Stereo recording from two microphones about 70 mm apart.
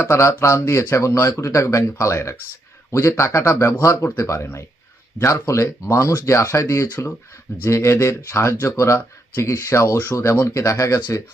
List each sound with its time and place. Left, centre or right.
0.0 s speech: left